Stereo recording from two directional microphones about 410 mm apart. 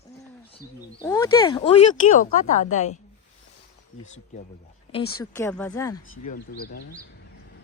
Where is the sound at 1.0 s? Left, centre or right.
Centre.